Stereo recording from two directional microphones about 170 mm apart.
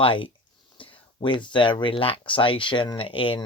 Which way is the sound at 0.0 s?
30° left (ahead or behind).